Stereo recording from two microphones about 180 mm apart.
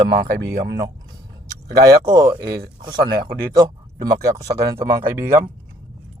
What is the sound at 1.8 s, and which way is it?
Speech, 20° right (ahead or behind).